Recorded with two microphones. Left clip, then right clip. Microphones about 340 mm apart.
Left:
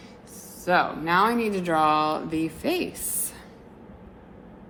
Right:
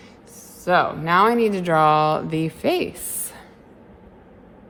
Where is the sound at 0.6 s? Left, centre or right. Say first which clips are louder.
Right 4 dB; right.